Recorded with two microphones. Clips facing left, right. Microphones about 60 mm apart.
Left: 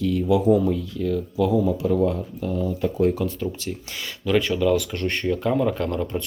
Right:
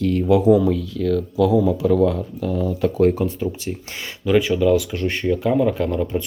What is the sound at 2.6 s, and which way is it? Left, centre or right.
Speech, right.